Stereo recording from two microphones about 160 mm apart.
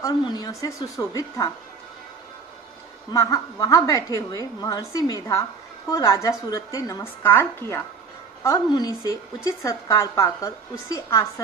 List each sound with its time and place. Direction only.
0.0 s a woman's voice: 25° left (ahead or behind)
3.1 s a woman's voice: 20° left (ahead or behind)
8.4 s a woman's voice: 25° left (ahead or behind)